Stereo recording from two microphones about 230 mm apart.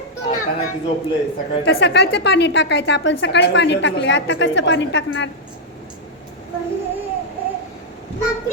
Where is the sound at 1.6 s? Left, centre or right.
Left.